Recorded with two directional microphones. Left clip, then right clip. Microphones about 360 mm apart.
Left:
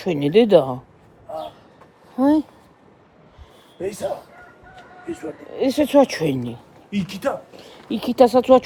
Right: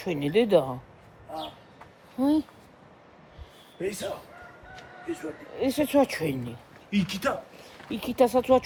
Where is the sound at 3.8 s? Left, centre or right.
Left.